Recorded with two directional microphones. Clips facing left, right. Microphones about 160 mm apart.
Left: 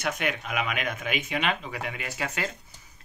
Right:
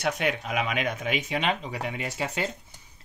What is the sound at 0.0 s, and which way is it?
Speech, 35° right (ahead or behind).